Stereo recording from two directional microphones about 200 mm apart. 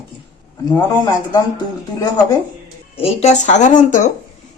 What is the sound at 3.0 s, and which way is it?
A woman's voice, 30° left (ahead or behind).